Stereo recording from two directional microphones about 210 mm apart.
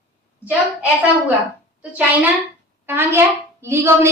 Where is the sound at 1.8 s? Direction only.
5° right (ahead or behind).